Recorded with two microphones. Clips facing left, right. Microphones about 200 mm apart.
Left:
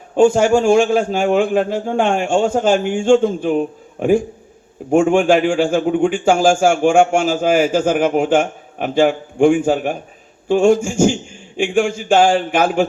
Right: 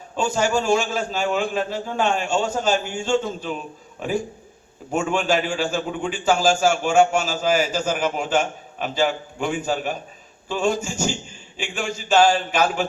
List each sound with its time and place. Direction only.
0.2 s a man's voice: 55° left (ahead or behind)